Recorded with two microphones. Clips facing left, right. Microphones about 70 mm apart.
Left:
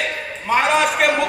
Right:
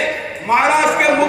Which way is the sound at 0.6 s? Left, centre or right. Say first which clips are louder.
Right 2 dB; right.